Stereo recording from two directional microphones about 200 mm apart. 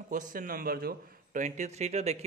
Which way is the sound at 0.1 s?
40° right (ahead or behind).